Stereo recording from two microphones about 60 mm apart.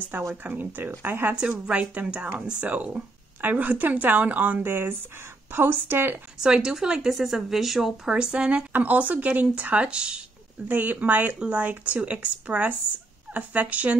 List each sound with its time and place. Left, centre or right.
0.4 s speech: right
1.7 s speech: centre; by 6.1 s right
6.4 s a woman's voice: centre
10.7 s speech: right